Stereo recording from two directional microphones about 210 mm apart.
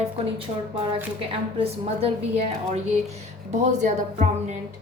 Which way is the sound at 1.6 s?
30° right (ahead or behind).